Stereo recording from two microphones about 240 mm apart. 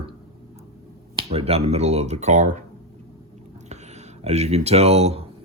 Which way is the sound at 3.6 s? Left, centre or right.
Right.